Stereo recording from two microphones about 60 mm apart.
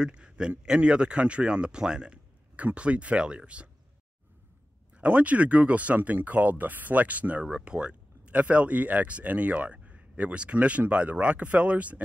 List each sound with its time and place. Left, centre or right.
0.0 s speech: centre
4.9 s speech: right